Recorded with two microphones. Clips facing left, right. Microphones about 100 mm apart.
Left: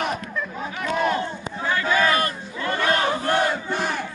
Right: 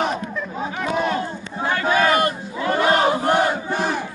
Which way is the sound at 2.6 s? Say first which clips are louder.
Right 5 dB; 20° right (ahead or behind).